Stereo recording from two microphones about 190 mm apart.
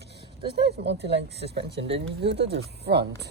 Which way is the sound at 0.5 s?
60° right (ahead or behind).